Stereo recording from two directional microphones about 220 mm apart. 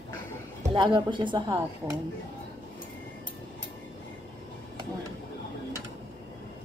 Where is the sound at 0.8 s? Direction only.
20° right (ahead or behind).